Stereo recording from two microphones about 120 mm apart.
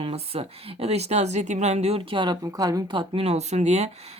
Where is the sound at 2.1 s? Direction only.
40° right (ahead or behind).